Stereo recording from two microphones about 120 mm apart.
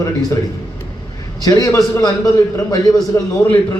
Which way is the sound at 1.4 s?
30° left (ahead or behind).